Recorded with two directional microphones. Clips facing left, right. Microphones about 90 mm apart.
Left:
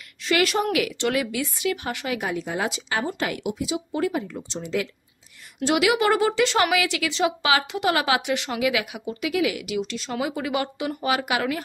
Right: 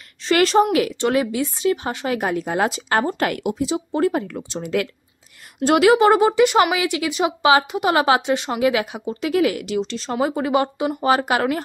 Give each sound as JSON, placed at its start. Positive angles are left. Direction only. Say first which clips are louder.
{"t": 0.2, "sound": "a woman's voice", "louder": "right 6 dB", "side_deg": -35}
{"t": 2.0, "sound": "a woman's voice", "louder": "right 6 dB", "side_deg": -45}
{"t": 4.3, "sound": "speech", "louder": "right 4 dB", "side_deg": -60}
{"t": 5.6, "sound": "a woman's voice", "louder": "right 7 dB", "side_deg": -40}
{"t": 5.9, "sound": "a woman's voice", "louder": "right 6 dB", "side_deg": -25}
{"t": 6.7, "sound": "a woman's voice", "louder": "right 2 dB", "side_deg": -25}
{"t": 9.3, "sound": "a woman's voice", "louder": "right 5 dB", "side_deg": -45}